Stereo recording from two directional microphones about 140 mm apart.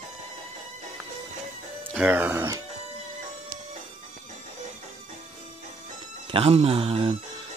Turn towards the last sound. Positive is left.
turn(degrees=-40)  # may be behind; listen again after turning